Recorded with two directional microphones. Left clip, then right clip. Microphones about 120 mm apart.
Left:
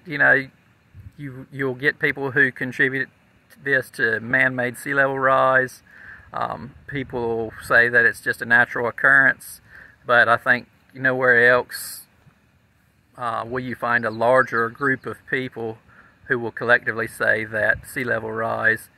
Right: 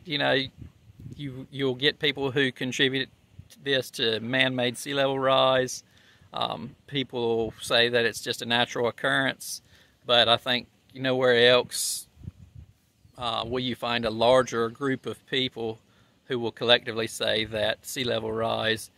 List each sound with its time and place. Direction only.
0.0 s speech: 15° right (ahead or behind)
13.1 s speech: 15° right (ahead or behind)